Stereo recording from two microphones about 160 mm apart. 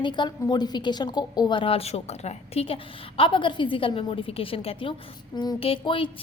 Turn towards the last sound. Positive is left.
turn(degrees=35)  # may be behind; listen again after turning